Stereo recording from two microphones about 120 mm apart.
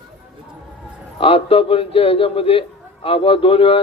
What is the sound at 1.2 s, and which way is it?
Speech, 50° left (ahead or behind).